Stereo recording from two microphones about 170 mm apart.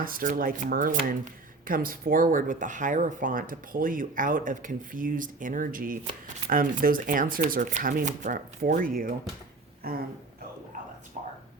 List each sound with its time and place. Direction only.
0.0 s speech: 55° right (ahead or behind)
9.8 s speech: 65° right (ahead or behind)